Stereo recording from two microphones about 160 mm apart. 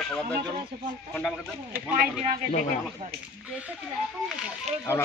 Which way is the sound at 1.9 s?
65° right (ahead or behind).